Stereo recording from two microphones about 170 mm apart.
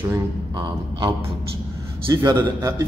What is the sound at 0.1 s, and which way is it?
A man's voice, 25° right (ahead or behind).